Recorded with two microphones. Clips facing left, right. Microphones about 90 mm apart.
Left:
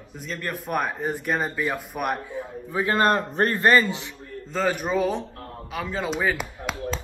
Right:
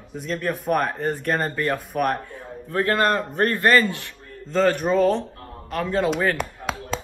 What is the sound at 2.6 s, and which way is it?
A man's voice, 15° left (ahead or behind).